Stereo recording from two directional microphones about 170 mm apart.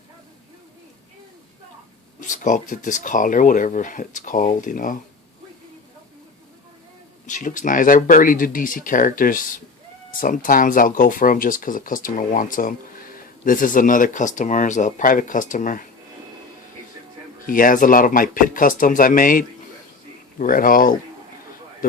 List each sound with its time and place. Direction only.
2.2 s speech: 50° left (ahead or behind)
7.3 s speech: 50° left (ahead or behind)
17.4 s speech: 55° left (ahead or behind)